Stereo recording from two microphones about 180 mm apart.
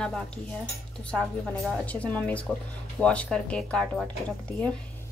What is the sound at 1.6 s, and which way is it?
Speech, 5° left (ahead or behind).